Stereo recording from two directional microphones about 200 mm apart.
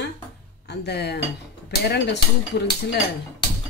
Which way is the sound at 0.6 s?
55° left (ahead or behind).